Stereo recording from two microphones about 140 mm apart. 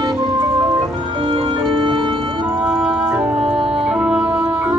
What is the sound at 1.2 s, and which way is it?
Music, 40° right (ahead or behind).